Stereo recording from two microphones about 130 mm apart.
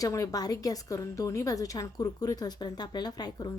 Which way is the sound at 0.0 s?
25° left (ahead or behind).